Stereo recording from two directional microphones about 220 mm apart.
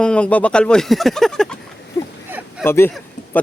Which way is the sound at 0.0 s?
5° left (ahead or behind).